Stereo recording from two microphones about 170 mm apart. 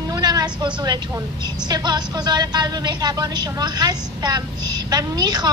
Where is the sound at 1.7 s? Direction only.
25° right (ahead or behind).